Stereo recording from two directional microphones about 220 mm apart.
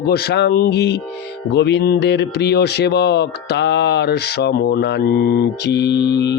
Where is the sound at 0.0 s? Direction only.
45° left (ahead or behind).